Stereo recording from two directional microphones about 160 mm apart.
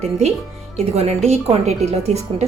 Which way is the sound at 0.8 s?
40° right (ahead or behind).